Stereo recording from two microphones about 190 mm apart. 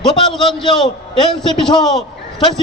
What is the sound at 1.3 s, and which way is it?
Speech, centre (ahead or behind).